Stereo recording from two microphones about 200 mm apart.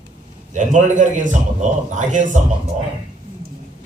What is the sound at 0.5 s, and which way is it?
A man's voice, 40° right (ahead or behind).